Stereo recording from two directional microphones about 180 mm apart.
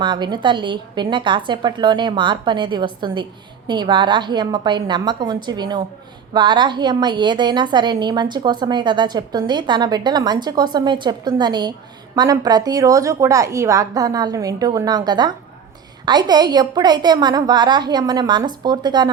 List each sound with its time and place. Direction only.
0.0 s a woman's voice: 25° right (ahead or behind)